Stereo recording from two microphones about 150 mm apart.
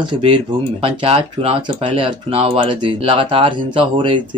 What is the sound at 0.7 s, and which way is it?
Speech, 40° right (ahead or behind).